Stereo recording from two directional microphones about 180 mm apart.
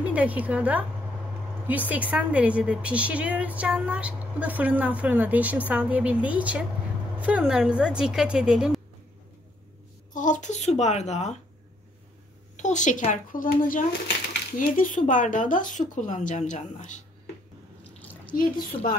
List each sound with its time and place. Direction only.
0.0 s a woman's voice: 10° right (ahead or behind)
10.1 s speech: 45° left (ahead or behind)
12.5 s speech: 40° left (ahead or behind)
18.3 s speech: 50° left (ahead or behind)